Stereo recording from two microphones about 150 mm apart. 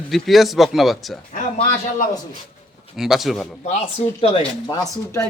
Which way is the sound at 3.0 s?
Centre (ahead or behind).